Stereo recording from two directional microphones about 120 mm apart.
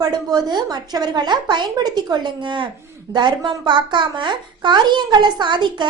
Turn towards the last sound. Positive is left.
turn(degrees=-40)  # may be behind; listen again after turning